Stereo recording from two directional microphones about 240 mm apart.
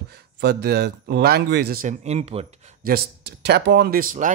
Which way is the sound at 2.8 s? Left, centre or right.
Right.